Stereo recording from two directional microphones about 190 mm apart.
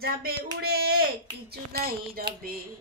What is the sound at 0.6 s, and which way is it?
Child singing, 55° right (ahead or behind).